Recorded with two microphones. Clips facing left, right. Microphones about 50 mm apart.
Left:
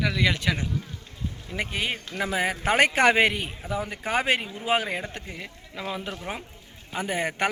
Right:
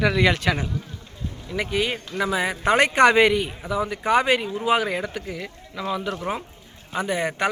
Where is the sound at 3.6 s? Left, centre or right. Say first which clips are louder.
Right 5 dB; right.